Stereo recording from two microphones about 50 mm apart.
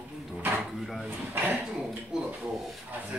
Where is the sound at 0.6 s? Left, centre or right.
Centre.